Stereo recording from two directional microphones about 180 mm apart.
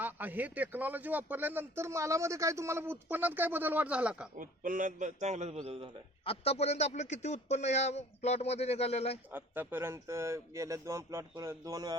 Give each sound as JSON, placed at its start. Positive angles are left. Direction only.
{"t": 0.0, "sound": "a man's voice", "side_deg": -10}
{"t": 4.4, "sound": "a man's voice", "side_deg": -50}
{"t": 6.2, "sound": "speech", "side_deg": 35}
{"t": 9.3, "sound": "a man's voice", "side_deg": -10}